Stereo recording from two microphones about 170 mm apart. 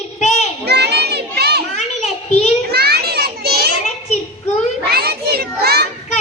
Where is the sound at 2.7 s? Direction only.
70° right (ahead or behind).